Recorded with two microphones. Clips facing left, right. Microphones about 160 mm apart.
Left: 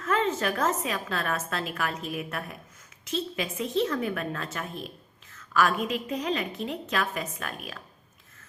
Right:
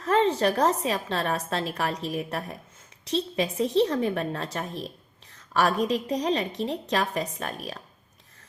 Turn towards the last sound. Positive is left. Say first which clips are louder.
# right 3 dB
turn(degrees=-35)  # may be behind; listen again after turning